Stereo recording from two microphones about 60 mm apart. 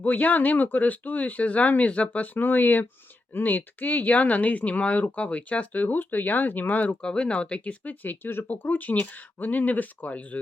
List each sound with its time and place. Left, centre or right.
0.0 s speech: left
7.0 s speech: centre